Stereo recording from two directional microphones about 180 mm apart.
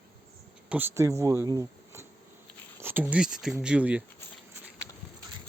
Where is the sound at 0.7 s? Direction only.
10° right (ahead or behind).